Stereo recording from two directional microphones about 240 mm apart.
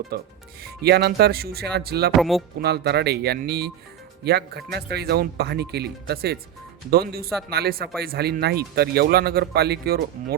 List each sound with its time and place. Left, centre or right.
0.1 s speech: right
2.1 s speech: centre
2.6 s speech: right